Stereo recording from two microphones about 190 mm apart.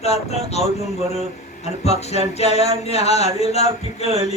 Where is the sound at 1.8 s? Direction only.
35° left (ahead or behind).